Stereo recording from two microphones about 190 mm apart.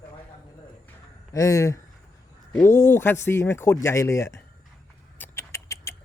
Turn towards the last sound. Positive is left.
turn(degrees=15)  # may be behind; listen again after turning